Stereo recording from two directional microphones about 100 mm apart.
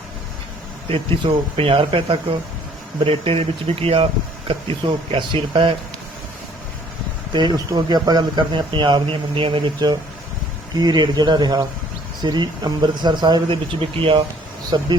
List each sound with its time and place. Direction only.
0.9 s speech: 65° right (ahead or behind)
4.4 s speech: 60° right (ahead or behind)
7.3 s speech: 45° right (ahead or behind); by 14.3 s 60° right (ahead or behind)
14.7 s speech: 45° right (ahead or behind)